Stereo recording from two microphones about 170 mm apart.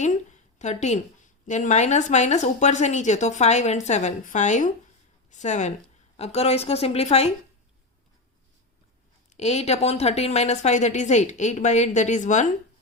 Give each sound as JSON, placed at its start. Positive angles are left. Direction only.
{"t": 0.0, "sound": "a woman's voice", "side_deg": 45}
{"t": 9.3, "sound": "speech", "side_deg": 40}